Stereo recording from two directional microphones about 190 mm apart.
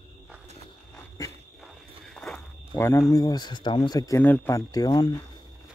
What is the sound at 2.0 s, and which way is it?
Walk, 5° left (ahead or behind).